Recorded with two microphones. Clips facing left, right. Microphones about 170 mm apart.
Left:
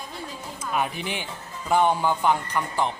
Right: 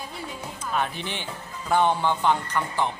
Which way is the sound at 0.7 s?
10° left (ahead or behind).